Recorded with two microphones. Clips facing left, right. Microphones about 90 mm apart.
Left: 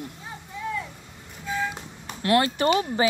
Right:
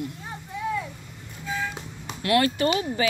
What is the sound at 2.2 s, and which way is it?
Speech, 30° left (ahead or behind).